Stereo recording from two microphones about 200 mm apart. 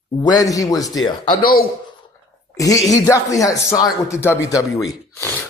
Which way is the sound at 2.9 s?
15° left (ahead or behind).